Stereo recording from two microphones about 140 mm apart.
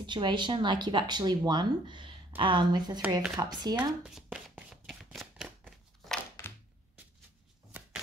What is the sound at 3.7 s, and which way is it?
Shuffling cards, 5° right (ahead or behind).